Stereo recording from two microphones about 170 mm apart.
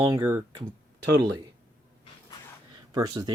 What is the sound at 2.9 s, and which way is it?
Speech, 20° right (ahead or behind).